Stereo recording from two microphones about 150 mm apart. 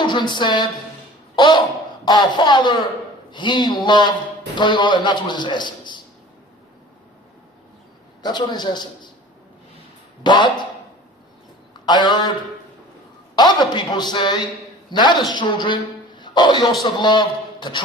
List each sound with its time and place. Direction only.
0.0 s a woman's voice: 30° left (ahead or behind)
8.2 s speech: 30° left (ahead or behind)
10.2 s a man's voice: 30° left (ahead or behind)
11.9 s speech: 30° left (ahead or behind)
13.3 s a man's voice: 30° left (ahead or behind)